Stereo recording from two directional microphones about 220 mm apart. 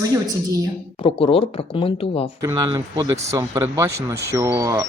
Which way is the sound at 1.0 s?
25° left (ahead or behind).